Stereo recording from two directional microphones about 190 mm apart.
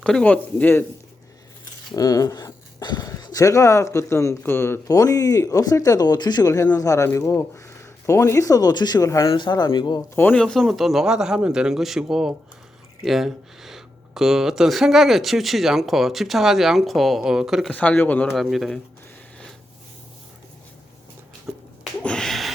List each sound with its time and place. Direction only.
0.0 s speech: 5° left (ahead or behind)
2.0 s speech: 20° left (ahead or behind)
10.2 s speech: 5° left (ahead or behind)
21.5 s a sound: centre (ahead or behind)